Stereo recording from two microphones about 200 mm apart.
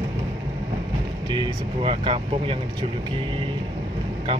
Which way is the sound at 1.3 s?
25° right (ahead or behind).